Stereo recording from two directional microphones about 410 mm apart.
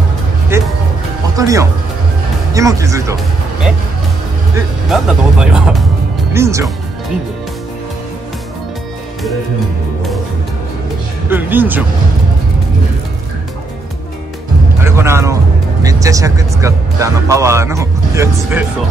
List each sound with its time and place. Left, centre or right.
0.5 s music: centre
1.3 s speech: centre
4.9 s speech: centre
11.2 s speech: centre
14.8 s speech: centre